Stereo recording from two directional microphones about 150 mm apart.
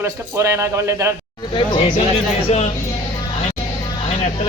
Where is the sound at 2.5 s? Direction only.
45° left (ahead or behind).